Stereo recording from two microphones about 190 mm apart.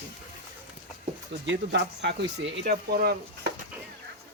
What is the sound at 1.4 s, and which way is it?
Speech, 65° right (ahead or behind).